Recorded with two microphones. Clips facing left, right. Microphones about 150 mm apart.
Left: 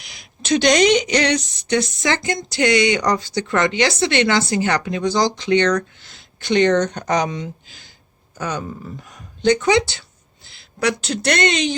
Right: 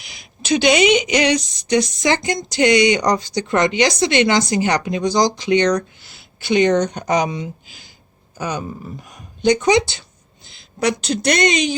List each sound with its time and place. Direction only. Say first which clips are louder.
0.0 s a woman's voice: right 1 dB; centre (ahead or behind)